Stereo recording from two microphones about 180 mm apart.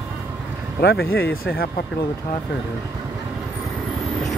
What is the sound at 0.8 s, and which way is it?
Speech, 65° left (ahead or behind).